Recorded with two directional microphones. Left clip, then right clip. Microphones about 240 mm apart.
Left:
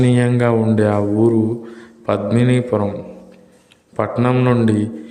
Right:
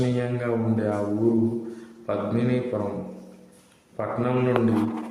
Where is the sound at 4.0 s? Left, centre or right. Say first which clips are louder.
Left 8 dB; left.